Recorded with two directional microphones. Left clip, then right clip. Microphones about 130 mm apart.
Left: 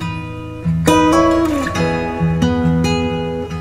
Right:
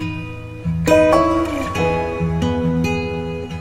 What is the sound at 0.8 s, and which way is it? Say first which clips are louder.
Music: even; 25° right (ahead or behind).